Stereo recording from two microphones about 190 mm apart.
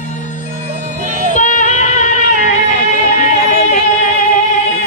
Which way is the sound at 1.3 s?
40° left (ahead or behind).